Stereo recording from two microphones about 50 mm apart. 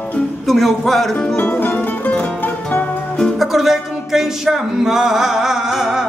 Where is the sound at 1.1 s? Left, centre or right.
Centre.